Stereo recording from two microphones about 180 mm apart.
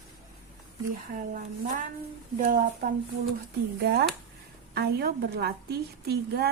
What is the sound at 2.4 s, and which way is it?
Speech, 50° right (ahead or behind).